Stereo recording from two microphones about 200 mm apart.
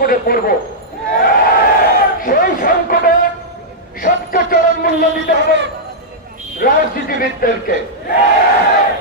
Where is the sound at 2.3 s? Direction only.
45° left (ahead or behind).